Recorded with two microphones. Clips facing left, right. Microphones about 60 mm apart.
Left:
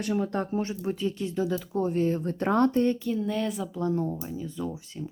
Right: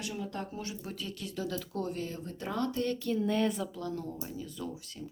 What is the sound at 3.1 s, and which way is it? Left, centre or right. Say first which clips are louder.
Speech: left 1 dB; centre.